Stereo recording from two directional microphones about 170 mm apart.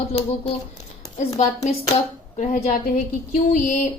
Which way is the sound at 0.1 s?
35° left (ahead or behind).